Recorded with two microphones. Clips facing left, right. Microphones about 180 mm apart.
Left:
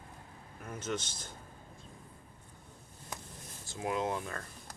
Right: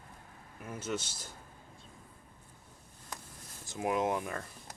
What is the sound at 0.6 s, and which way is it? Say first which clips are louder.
Speech: even; 5° right (ahead or behind).